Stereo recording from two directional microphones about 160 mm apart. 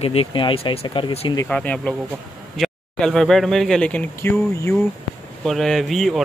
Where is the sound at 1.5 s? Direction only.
10° left (ahead or behind).